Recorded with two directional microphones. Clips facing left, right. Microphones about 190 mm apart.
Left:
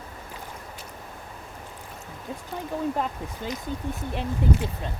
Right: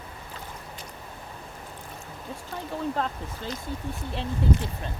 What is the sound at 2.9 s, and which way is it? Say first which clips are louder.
Speech: left 1 dB; 15° left (ahead or behind).